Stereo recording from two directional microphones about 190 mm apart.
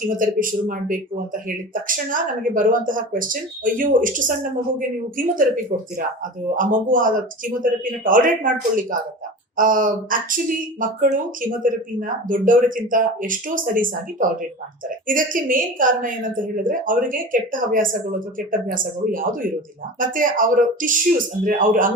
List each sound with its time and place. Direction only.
0.0 s a woman's voice: 45° right (ahead or behind)